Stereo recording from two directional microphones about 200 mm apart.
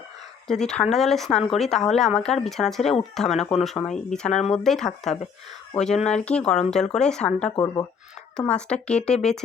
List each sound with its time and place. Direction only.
0.6 s speech: 5° left (ahead or behind)
2.8 s speech: 30° left (ahead or behind)
3.2 s speech: centre (ahead or behind)
7.5 s speech: 15° left (ahead or behind)
8.4 s speech: 5° left (ahead or behind)